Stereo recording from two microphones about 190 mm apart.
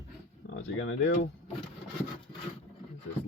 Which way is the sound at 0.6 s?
85° left.